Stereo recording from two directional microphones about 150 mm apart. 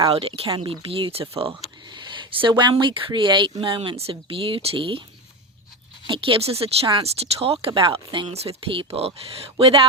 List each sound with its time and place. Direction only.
0.1 s speech: 40° right (ahead or behind)
0.4 s speech: 30° right (ahead or behind)
6.1 s speech: 35° right (ahead or behind)